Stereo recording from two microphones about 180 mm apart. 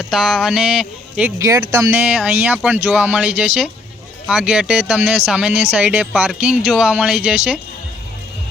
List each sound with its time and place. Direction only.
0.0 s speech: 5° right (ahead or behind)
1.4 s speech: 20° right (ahead or behind)